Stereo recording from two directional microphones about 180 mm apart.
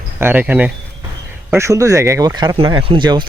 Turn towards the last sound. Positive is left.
turn(degrees=-25)  # may be behind; listen again after turning